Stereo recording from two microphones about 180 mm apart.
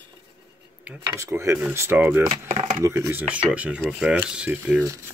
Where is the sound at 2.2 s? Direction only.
40° right (ahead or behind).